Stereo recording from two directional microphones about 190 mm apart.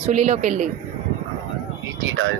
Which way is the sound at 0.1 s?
40° right (ahead or behind).